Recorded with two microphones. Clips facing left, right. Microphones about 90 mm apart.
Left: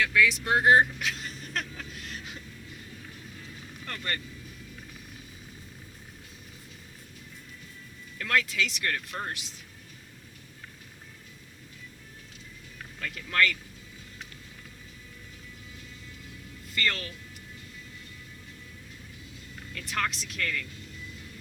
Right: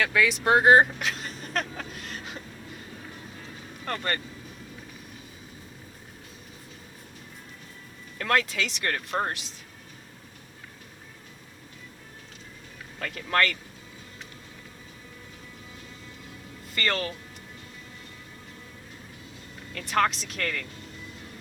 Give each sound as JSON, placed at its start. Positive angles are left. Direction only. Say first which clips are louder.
{"t": 0.0, "sound": "speech", "louder": "right 1 dB", "side_deg": -55}
{"t": 0.4, "sound": "vehicle", "louder": "right 5 dB", "side_deg": -60}
{"t": 8.2, "sound": "speech", "louder": "right 2 dB", "side_deg": -50}
{"t": 13.0, "sound": "speech", "louder": "right 2 dB", "side_deg": -55}
{"t": 16.7, "sound": "speech", "louder": "right 3 dB", "side_deg": -60}
{"t": 19.9, "sound": "speech", "louder": "right 8 dB", "side_deg": -40}